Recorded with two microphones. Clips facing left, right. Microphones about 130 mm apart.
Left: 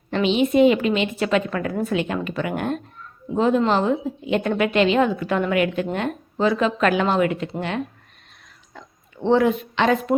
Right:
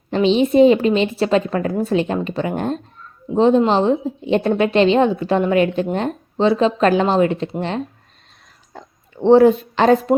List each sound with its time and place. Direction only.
0.1 s a woman's voice: 30° right (ahead or behind)
8.7 s oink: 35° right (ahead or behind)
9.2 s a woman's voice: 35° right (ahead or behind)